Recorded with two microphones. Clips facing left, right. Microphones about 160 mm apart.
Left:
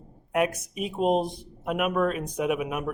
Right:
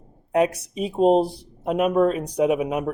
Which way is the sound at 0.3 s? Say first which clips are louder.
Right 5 dB; 30° right (ahead or behind).